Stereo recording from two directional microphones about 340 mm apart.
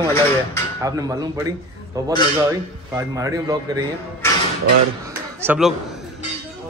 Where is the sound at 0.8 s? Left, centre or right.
Centre.